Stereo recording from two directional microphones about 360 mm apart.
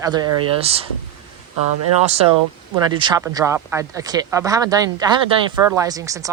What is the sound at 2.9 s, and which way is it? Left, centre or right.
Speech, centre.